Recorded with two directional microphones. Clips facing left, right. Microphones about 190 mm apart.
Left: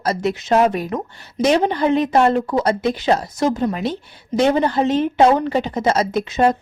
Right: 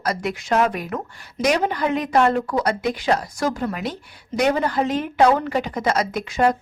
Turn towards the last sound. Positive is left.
turn(degrees=25)  # may be behind; listen again after turning